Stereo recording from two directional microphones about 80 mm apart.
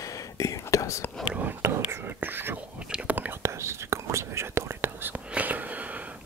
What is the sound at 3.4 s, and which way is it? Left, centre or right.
Whispering, right.